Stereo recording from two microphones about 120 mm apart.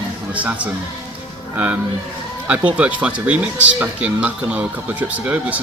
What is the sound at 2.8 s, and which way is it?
Speech, 10° right (ahead or behind).